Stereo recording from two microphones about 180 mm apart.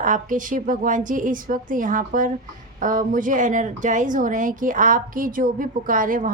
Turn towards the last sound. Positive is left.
turn(degrees=-50)  # may be behind; listen again after turning